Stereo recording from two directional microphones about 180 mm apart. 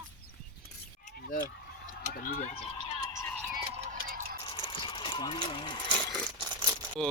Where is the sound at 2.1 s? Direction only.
50° left (ahead or behind).